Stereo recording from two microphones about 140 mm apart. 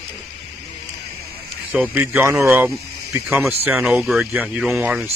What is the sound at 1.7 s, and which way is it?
Speech, 10° right (ahead or behind).